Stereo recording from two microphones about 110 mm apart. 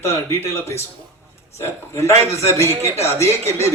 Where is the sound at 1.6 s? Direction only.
25° left (ahead or behind).